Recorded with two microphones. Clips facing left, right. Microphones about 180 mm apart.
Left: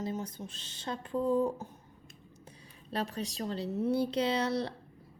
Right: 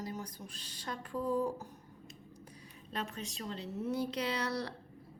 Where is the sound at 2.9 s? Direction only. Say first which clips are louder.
Left 6 dB; 35° left (ahead or behind).